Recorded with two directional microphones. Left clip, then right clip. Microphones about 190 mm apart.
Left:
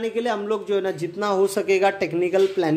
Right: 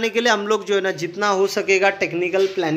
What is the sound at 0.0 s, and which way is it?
A man's voice, centre (ahead or behind).